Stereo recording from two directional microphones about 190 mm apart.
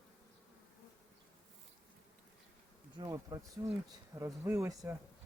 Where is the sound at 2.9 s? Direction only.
20° right (ahead or behind).